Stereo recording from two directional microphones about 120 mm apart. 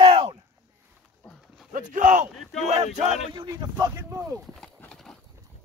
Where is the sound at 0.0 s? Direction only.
55° right (ahead or behind).